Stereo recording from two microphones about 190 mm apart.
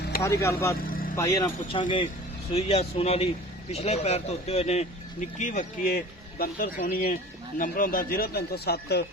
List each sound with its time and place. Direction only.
0.2 s speech: 15° left (ahead or behind)
0.8 s vehicle: 50° left (ahead or behind)
1.1 s speech: 15° left (ahead or behind)
2.5 s speech: 30° left (ahead or behind); by 9.0 s 55° left (ahead or behind)